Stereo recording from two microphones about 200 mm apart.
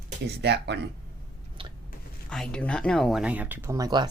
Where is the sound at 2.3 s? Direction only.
5° left (ahead or behind); by 4.1 s 20° right (ahead or behind).